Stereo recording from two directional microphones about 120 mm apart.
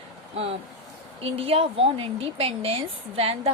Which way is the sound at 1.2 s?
50° right (ahead or behind).